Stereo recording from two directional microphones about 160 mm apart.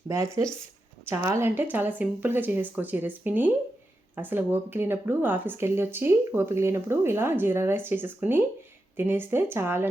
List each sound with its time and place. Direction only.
0.1 s speech: 20° right (ahead or behind)